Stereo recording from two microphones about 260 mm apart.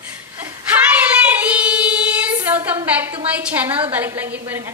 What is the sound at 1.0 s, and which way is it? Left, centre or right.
Child singing, centre.